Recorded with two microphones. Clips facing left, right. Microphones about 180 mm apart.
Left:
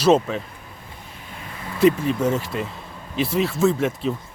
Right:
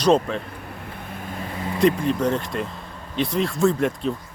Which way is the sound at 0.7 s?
65° right (ahead or behind).